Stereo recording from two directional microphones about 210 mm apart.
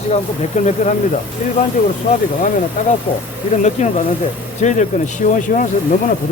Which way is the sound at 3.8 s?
35° left (ahead or behind).